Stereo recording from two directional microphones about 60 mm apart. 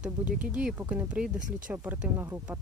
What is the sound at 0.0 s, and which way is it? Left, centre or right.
Speech, right.